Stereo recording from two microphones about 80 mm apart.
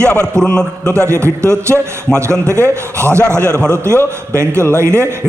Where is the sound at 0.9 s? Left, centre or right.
Right.